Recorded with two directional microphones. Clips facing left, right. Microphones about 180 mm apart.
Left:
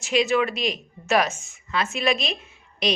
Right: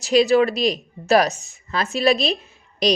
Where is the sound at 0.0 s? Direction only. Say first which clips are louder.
Right 6 dB; 35° right (ahead or behind).